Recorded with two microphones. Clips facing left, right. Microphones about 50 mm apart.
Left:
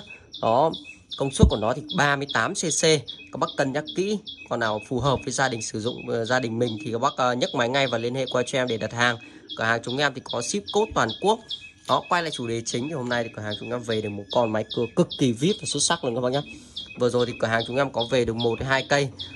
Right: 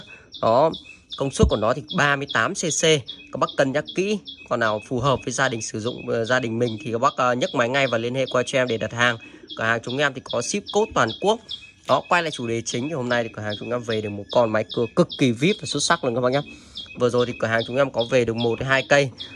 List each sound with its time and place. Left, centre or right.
0.4 s speech: right
1.1 s speech: right
2.0 s speech: right
13.5 s speech: right
14.3 s speech: right
14.8 s speech: right
17.0 s speech: right